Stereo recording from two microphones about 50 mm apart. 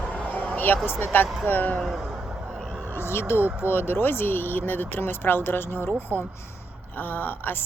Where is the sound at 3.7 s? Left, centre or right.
Left.